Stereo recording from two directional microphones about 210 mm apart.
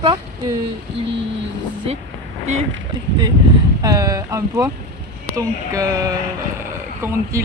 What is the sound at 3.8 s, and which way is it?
Speech, 15° right (ahead or behind).